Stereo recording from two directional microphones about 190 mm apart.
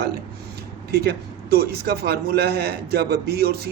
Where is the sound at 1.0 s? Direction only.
55° right (ahead or behind).